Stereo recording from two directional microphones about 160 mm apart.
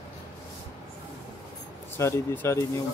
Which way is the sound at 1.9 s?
15° left (ahead or behind).